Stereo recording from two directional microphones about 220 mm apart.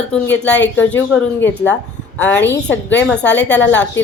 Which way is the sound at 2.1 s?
10° left (ahead or behind).